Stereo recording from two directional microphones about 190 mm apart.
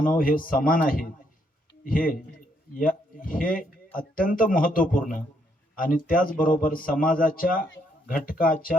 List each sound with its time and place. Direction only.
0.0 s speech: 45° left (ahead or behind)